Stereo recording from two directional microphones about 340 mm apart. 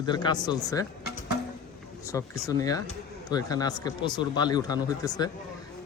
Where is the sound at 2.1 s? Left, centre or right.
Centre.